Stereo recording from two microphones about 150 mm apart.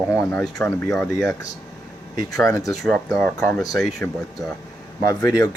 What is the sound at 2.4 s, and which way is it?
Speech, 20° left (ahead or behind).